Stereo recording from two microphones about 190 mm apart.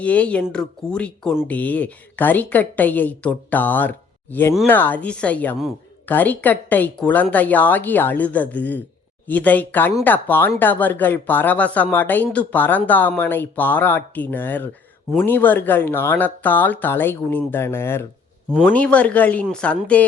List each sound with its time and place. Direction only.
0.0 s speech: 5° left (ahead or behind)